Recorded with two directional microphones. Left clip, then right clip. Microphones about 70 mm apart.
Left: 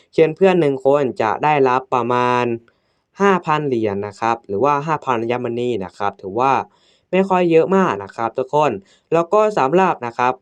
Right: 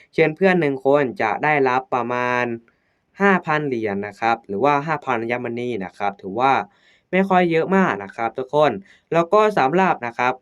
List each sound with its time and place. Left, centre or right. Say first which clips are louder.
0.3 s speech: left 3 dB; left
1.9 s speech: left 4 dB; left
3.2 s speech: left 2 dB; left
3.7 s speech: left 4 dB; left